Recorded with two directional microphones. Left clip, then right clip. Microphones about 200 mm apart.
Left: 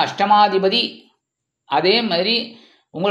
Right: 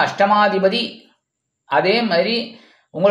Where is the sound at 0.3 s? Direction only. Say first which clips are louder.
Left 1 dB; 25° left (ahead or behind).